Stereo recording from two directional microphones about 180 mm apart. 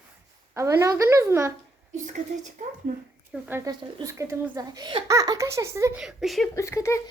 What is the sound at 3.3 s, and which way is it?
Speech, 10° right (ahead or behind).